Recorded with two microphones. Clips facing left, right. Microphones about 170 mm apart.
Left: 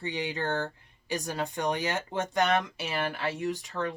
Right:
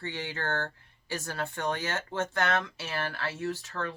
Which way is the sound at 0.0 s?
15° left (ahead or behind).